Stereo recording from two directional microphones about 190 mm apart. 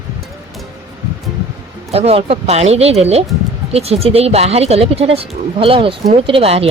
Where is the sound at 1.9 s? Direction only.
30° right (ahead or behind).